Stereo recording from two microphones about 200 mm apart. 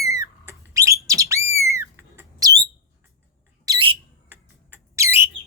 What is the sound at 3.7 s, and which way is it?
Bird, 25° right (ahead or behind).